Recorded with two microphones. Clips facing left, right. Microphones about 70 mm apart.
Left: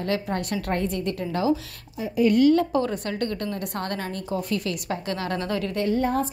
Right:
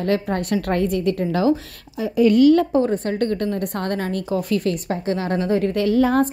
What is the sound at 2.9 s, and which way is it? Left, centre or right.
A woman's voice, right.